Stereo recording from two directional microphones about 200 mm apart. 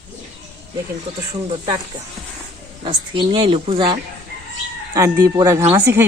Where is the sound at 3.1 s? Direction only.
25° right (ahead or behind).